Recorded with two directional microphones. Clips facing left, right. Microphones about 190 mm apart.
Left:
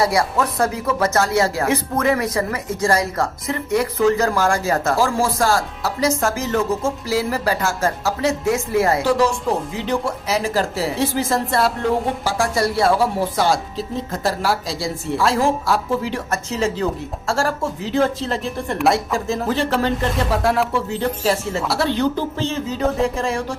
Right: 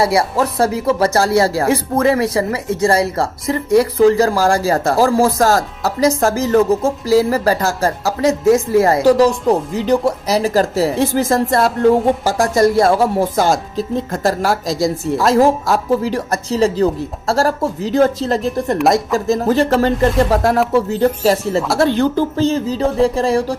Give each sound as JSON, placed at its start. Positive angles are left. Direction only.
{"t": 0.0, "sound": "speech", "side_deg": -30}